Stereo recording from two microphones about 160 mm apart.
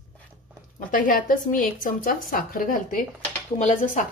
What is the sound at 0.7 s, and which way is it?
Speech, 60° left (ahead or behind).